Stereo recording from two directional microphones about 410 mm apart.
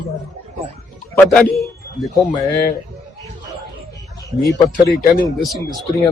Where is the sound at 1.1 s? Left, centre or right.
Centre.